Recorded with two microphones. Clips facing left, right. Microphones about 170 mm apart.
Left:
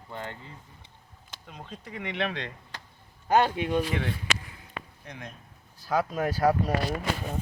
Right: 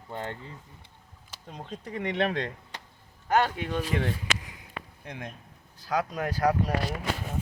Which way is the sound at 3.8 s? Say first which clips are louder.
Right 1 dB; 40° right (ahead or behind).